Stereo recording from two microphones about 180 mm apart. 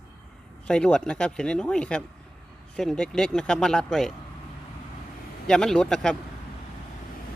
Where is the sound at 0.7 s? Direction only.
5° left (ahead or behind).